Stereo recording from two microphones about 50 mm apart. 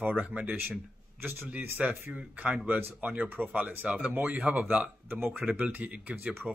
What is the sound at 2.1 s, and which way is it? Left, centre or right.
Speech, right.